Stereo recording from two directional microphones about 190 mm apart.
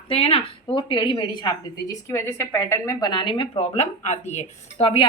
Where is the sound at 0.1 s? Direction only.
30° left (ahead or behind).